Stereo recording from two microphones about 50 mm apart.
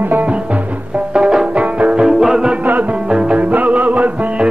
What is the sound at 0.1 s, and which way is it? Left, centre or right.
Music, right.